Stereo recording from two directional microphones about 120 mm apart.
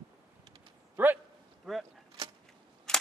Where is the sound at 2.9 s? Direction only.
5° left (ahead or behind).